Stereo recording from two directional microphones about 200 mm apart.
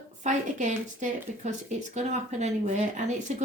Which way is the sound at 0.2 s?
40° right (ahead or behind).